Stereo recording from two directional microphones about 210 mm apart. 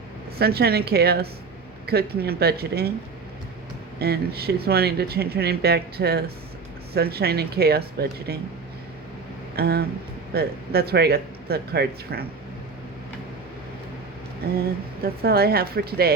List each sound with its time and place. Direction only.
0.3 s speech: 50° right (ahead or behind)
4.0 s speech: 50° right (ahead or behind)
9.6 s speech: 50° right (ahead or behind)
15.0 s speech: 45° right (ahead or behind)